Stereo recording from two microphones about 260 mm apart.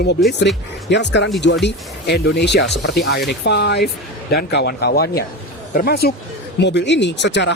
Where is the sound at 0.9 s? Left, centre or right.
Left.